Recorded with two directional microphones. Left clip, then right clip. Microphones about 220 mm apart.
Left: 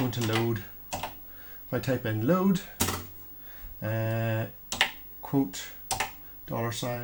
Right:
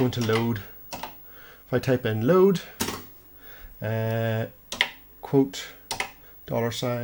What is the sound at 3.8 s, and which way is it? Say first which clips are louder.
Speech: right 4 dB; 45° right (ahead or behind).